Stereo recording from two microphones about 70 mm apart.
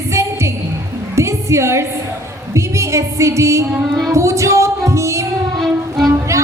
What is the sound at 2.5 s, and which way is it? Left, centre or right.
Music, right.